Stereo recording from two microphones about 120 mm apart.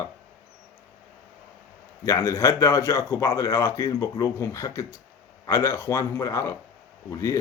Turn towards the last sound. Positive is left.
turn(degrees=25)  # may be behind; listen again after turning